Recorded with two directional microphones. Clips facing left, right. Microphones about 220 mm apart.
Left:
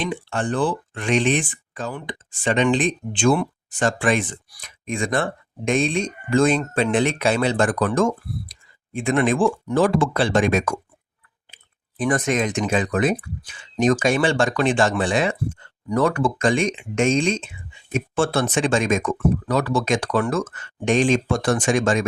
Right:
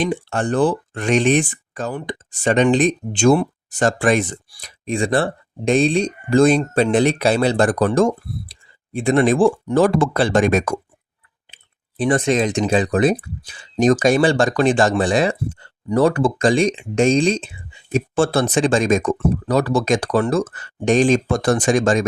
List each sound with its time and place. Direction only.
0.0 s speech: 40° right (ahead or behind)
11.5 s speech: 30° right (ahead or behind)